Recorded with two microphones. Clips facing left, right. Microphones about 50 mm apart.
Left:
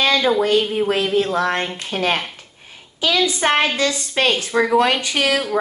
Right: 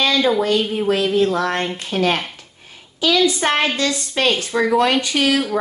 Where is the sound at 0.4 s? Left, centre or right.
Centre.